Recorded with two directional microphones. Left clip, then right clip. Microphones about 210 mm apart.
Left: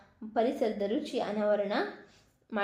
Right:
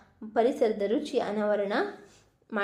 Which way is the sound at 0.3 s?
20° right (ahead or behind).